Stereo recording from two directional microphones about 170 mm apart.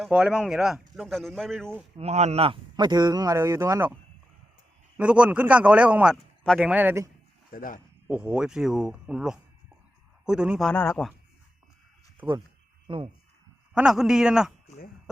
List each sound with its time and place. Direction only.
0.0 s speech: 5° right (ahead or behind)
2.0 s speech: 40° right (ahead or behind); by 3.9 s 15° right (ahead or behind)
4.9 s a man's voice: 5° right (ahead or behind)
7.5 s speech: 55° left (ahead or behind)
8.0 s speech: 5° right (ahead or behind)
10.7 s speech: 10° left (ahead or behind)
12.2 s speech: 5° right (ahead or behind)
13.7 s speech: 5° right (ahead or behind)